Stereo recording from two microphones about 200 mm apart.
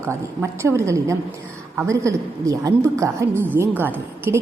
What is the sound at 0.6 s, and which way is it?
A woman's voice, 15° right (ahead or behind).